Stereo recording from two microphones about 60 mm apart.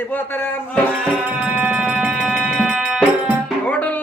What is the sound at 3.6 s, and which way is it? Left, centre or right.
Music, left.